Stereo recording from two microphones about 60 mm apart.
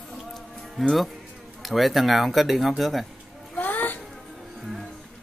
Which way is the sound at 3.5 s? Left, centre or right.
Left.